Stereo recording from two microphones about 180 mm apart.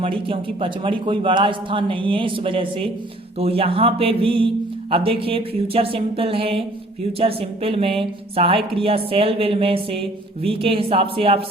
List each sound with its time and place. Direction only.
0.0 s a man's voice: 30° right (ahead or behind)